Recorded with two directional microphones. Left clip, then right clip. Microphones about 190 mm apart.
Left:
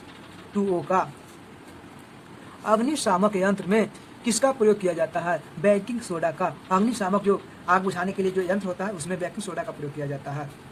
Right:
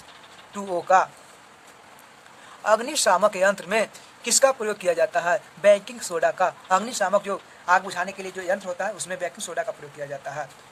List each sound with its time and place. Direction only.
0.5 s speech: 15° right (ahead or behind)
2.6 s speech: 15° right (ahead or behind)